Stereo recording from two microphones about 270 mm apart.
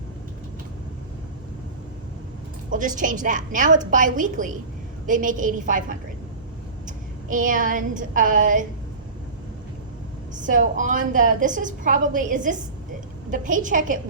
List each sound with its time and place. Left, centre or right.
2.6 s a woman's voice: right
10.4 s a woman's voice: right